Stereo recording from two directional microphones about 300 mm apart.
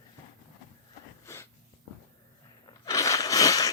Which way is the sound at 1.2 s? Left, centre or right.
Centre.